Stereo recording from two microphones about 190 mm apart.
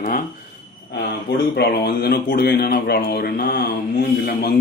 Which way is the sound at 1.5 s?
55° left (ahead or behind).